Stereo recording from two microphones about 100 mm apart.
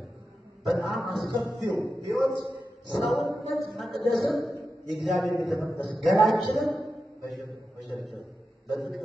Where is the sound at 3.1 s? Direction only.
Centre (ahead or behind).